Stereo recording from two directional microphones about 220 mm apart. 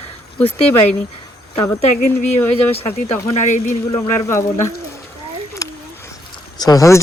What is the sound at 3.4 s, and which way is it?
Speech, 35° left (ahead or behind).